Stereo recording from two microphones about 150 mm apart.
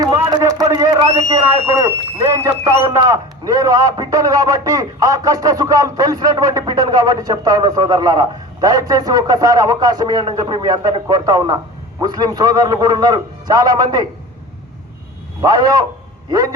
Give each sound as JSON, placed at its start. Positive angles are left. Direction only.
{"t": 0.0, "sound": "a sound", "side_deg": -25}
{"t": 1.6, "sound": "a man's voice", "side_deg": -20}
{"t": 15.4, "sound": "a man's voice", "side_deg": -25}